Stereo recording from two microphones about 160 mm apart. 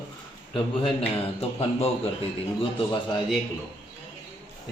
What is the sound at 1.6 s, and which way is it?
Speech, 40° left (ahead or behind).